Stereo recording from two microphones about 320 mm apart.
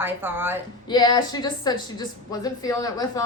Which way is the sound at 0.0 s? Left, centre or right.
Centre.